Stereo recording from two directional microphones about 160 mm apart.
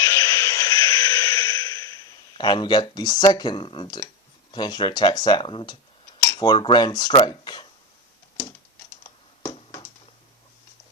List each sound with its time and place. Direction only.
0.0 s music: 15° left (ahead or behind)
2.4 s speech: 30° left (ahead or behind)
6.3 s cutlery: 25° left (ahead or behind)